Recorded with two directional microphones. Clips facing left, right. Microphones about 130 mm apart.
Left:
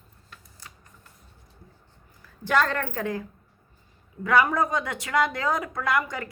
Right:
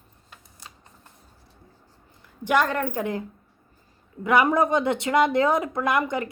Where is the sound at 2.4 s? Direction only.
15° right (ahead or behind).